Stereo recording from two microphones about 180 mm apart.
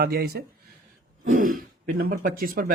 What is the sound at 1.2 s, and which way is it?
Speech, 50° right (ahead or behind).